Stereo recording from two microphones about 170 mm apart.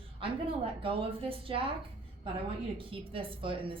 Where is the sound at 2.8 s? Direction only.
30° right (ahead or behind).